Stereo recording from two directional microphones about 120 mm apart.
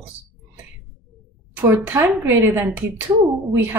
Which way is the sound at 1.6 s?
15° right (ahead or behind).